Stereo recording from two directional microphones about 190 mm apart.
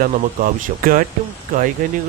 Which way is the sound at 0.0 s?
45° right (ahead or behind).